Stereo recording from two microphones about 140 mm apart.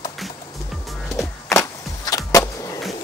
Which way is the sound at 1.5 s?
25° left (ahead or behind).